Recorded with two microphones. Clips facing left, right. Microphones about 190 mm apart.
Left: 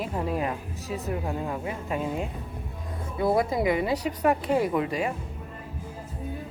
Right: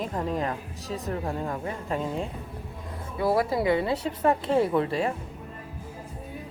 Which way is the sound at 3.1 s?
20° left (ahead or behind).